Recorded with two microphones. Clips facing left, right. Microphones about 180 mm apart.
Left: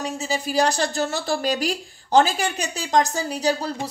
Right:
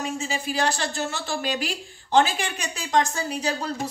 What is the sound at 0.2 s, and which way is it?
A woman's voice, 40° left (ahead or behind).